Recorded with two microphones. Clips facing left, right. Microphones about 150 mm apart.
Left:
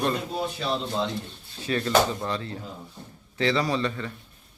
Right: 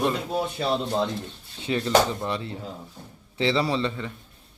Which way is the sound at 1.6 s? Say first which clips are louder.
Right 1 dB; 20° right (ahead or behind).